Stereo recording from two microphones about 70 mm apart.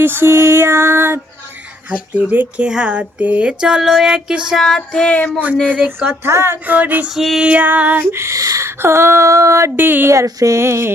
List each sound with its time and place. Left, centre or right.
0.0 s music: right
1.9 s speech: centre
2.6 s a sound: centre
4.6 s female singing: centre
5.6 s speech: centre
6.2 s music: right
6.7 s speech: right
7.1 s music: centre
7.4 s speech: right
8.1 s a sound: right
9.7 s speech: right
10.1 s a sound: right